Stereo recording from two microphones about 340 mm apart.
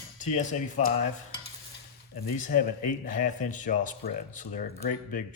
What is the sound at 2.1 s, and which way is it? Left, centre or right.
Speech, left.